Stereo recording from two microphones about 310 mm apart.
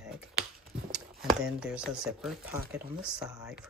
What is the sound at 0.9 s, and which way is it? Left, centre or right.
Speech, centre.